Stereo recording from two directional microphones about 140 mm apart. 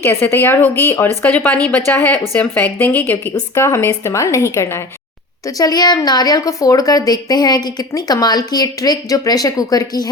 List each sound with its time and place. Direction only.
0.0 s a woman's voice: 15° left (ahead or behind)